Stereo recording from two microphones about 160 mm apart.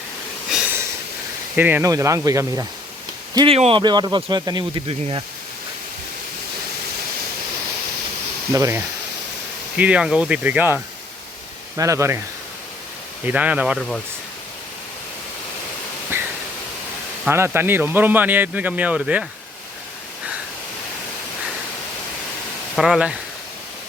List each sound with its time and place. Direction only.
0.5 s a sound: 5° right (ahead or behind)
1.5 s speech: 10° right (ahead or behind)
3.3 s speech: 35° right (ahead or behind)
4.9 s speech: 35° right (ahead or behind)
8.5 s speech: 20° right (ahead or behind)
9.7 s speech: 5° right (ahead or behind)
11.8 s speech: 20° right (ahead or behind)
13.2 s speech: 10° right (ahead or behind)
13.7 s speech: centre (ahead or behind)
16.1 s pink noise: 15° right (ahead or behind)
17.2 s speech: 15° right (ahead or behind)
22.7 s speech: centre (ahead or behind)